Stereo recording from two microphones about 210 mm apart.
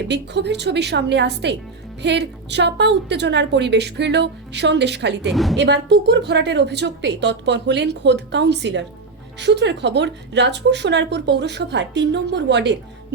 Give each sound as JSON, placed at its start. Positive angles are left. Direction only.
{"t": 0.1, "sound": "a woman's voice", "side_deg": -55}
{"t": 5.3, "sound": "a woman's voice", "side_deg": 0}
{"t": 5.5, "sound": "a woman's voice", "side_deg": -55}